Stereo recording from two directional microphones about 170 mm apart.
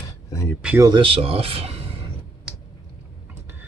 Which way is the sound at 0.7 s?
25° right (ahead or behind).